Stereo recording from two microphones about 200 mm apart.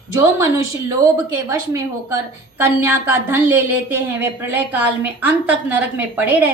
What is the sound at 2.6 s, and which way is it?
A woman's voice, 10° right (ahead or behind).